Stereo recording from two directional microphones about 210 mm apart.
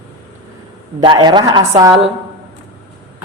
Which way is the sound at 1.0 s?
20° right (ahead or behind).